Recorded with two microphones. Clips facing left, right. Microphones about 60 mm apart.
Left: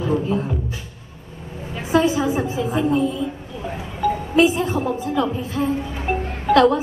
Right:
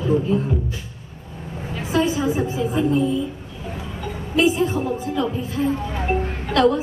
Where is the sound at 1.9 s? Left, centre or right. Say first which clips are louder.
Left 3 dB; left.